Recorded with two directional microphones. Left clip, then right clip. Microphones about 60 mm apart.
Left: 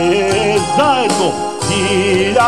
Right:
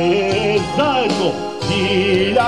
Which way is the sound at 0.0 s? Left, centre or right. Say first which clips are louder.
Left 3 dB; left.